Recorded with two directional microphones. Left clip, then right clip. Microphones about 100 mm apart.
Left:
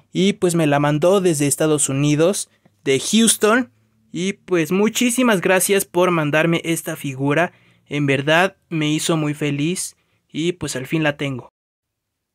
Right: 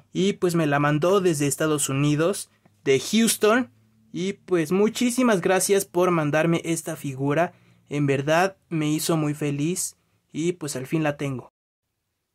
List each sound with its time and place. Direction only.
0.1 s speech: 40° left (ahead or behind)
2.6 s speech: 30° left (ahead or behind)